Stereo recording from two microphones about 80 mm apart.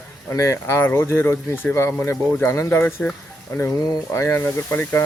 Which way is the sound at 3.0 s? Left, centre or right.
Centre.